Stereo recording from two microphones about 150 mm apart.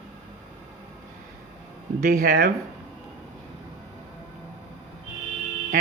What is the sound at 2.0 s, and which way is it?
Speech, 70° right (ahead or behind).